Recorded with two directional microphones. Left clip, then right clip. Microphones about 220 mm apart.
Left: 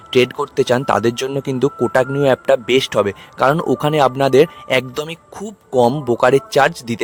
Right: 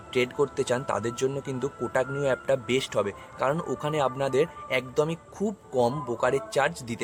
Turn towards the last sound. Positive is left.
turn(degrees=40)  # may be behind; listen again after turning